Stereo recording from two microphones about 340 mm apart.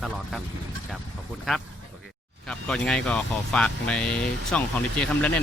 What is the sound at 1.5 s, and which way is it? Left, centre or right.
Speech, centre.